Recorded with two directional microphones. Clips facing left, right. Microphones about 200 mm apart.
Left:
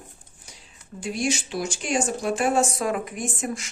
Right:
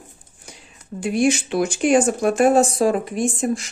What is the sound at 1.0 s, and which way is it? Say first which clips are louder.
Speech: right 8 dB; 55° right (ahead or behind).